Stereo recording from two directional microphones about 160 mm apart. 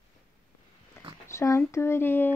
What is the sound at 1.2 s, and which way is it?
Speech, 15° left (ahead or behind).